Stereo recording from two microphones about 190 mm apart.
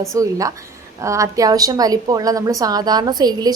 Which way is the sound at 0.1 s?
15° right (ahead or behind).